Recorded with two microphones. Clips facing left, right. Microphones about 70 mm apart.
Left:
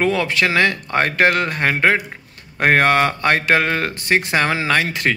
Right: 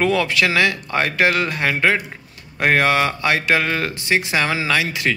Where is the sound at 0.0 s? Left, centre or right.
Left.